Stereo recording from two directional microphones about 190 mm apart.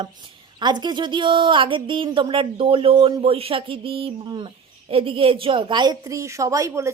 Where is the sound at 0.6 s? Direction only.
25° right (ahead or behind).